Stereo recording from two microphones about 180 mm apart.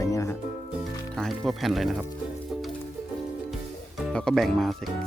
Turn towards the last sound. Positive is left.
turn(degrees=0)  # may be behind; listen again after turning